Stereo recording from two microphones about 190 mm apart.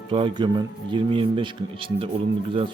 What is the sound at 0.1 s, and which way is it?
Speech, 25° right (ahead or behind).